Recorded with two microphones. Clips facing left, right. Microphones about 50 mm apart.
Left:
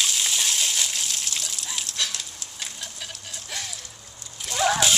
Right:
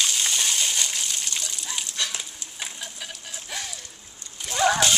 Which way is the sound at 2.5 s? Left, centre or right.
Centre.